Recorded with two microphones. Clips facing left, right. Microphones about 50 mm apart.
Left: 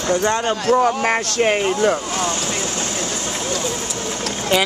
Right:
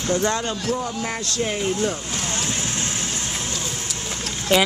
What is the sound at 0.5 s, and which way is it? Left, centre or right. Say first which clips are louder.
Speech: left 9 dB; left.